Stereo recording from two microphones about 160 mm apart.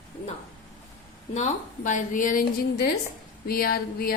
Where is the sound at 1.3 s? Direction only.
50° left (ahead or behind).